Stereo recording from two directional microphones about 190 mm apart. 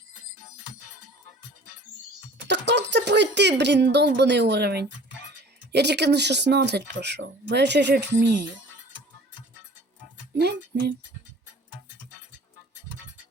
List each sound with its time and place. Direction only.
2.5 s speech: 65° right (ahead or behind)
10.3 s music: 60° right (ahead or behind)